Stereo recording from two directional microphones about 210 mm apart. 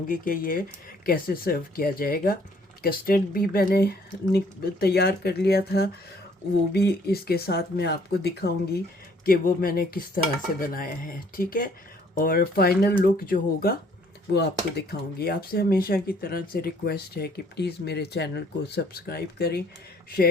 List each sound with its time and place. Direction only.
0.1 s speech: 40° left (ahead or behind)